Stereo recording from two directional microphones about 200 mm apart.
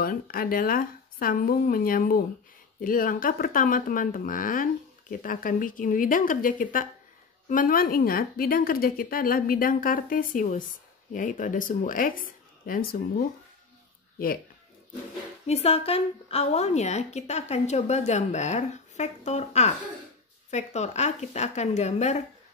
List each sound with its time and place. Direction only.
0.0 s a woman's voice: 45° left (ahead or behind)
15.4 s a woman's voice: 30° left (ahead or behind)